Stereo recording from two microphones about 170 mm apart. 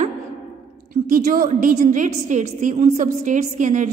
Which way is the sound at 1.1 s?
55° right (ahead or behind).